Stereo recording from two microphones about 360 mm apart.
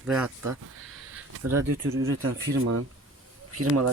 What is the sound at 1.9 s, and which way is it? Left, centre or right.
Speech, right.